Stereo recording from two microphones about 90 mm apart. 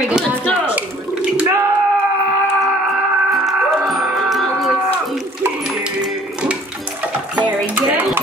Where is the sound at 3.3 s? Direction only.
Centre (ahead or behind).